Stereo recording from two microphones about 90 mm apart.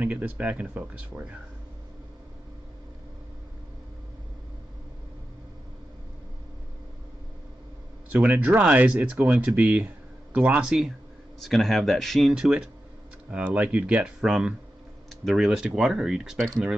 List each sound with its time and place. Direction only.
0.0 s speech: 15° right (ahead or behind)
8.1 s speech: 15° right (ahead or behind)